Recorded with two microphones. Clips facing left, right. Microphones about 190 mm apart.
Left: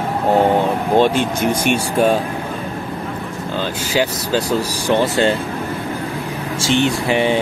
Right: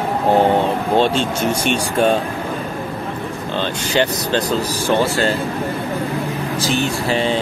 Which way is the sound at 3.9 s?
5° left (ahead or behind).